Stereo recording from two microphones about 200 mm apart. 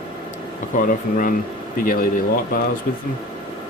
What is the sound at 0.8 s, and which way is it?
Speech, 45° left (ahead or behind).